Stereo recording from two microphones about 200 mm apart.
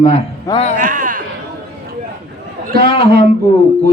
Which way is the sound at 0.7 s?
45° right (ahead or behind).